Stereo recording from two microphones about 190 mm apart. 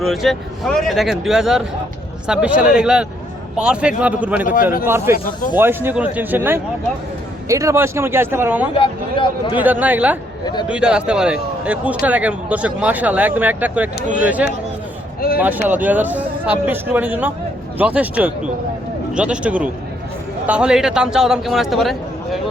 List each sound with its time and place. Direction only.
0.0 s a man's voice: centre (ahead or behind)
8.7 s a man's voice: 25° left (ahead or behind)
9.6 s speech: 10° right (ahead or behind)
10.4 s a man's voice: 20° left (ahead or behind)
10.7 s a man's voice: 5° right (ahead or behind)
15.2 s a sound: 50° left (ahead or behind)
15.6 s a man's voice: 10° right (ahead or behind)